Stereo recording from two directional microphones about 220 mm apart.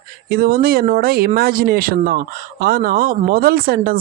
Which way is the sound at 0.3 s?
45° right (ahead or behind).